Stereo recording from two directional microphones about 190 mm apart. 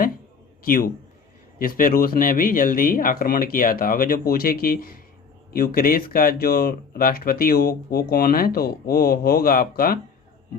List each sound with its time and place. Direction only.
0.6 s a man's voice: 50° left (ahead or behind)